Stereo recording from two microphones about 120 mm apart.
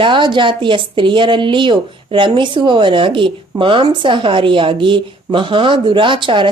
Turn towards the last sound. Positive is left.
turn(degrees=-45)  # may be behind; listen again after turning